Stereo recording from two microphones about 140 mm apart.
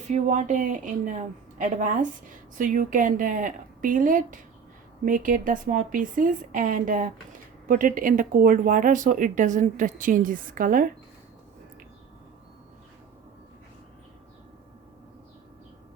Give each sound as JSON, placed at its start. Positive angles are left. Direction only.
{"t": 0.1, "sound": "a woman's voice", "side_deg": -60}